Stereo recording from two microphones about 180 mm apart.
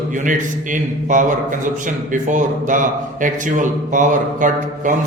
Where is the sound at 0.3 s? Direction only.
45° right (ahead or behind).